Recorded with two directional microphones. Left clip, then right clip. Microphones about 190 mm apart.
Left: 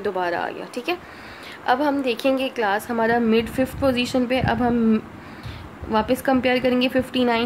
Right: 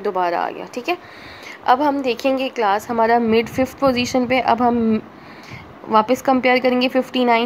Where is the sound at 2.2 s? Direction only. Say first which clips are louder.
Right 4 dB; 5° right (ahead or behind).